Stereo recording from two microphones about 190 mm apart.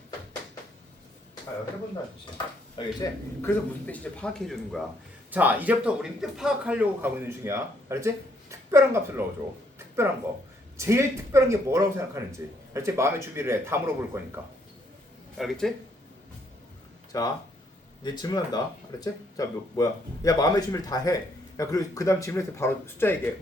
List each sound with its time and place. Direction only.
2.7 s a man's voice: 15° left (ahead or behind); by 9.2 s 15° right (ahead or behind)
9.7 s a sound: 15° right (ahead or behind)
10.8 s a man's voice: 15° right (ahead or behind)
15.4 s speech: centre (ahead or behind)
17.1 s speech: 20° left (ahead or behind)